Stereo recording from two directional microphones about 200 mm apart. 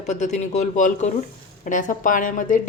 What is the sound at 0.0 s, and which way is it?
A woman's voice, 35° left (ahead or behind).